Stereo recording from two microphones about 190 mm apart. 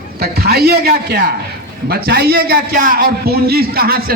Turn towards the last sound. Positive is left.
turn(degrees=-55)  # may be behind; listen again after turning